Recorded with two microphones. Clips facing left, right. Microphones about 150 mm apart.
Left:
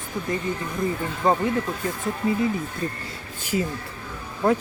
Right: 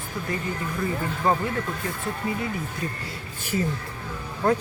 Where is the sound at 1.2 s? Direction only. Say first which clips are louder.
Left 2 dB; 20° left (ahead or behind).